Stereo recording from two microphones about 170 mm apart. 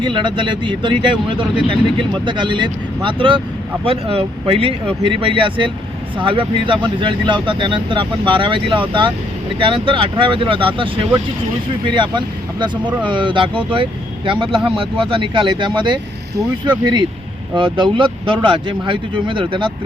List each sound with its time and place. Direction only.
0.0 s speech: 30° right (ahead or behind)